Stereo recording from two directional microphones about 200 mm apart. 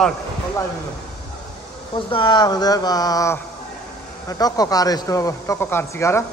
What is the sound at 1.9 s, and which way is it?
A man's voice, 25° left (ahead or behind).